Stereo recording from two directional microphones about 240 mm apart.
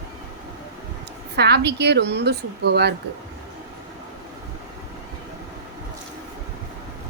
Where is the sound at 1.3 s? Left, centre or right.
Right.